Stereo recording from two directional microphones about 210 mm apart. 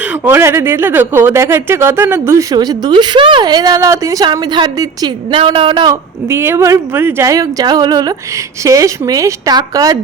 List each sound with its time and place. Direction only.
0.1 s speech: 10° right (ahead or behind)